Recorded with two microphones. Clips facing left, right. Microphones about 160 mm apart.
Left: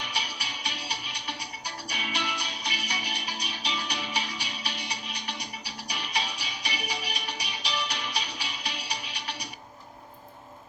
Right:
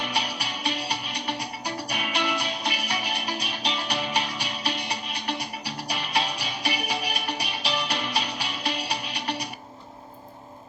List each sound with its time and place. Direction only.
0.0 s music: 55° right (ahead or behind)